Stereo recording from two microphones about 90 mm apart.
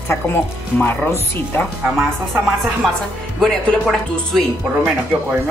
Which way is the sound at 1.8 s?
5° right (ahead or behind).